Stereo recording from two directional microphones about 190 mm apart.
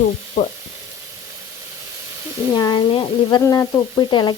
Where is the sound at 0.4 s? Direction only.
35° left (ahead or behind).